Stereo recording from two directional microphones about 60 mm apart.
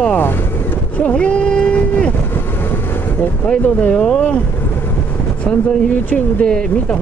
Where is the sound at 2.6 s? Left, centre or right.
Left.